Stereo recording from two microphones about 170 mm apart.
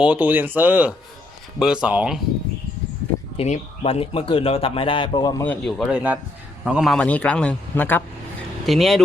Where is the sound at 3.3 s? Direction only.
40° left (ahead or behind).